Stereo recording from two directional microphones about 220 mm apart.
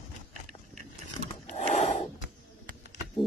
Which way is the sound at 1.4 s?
30° left (ahead or behind).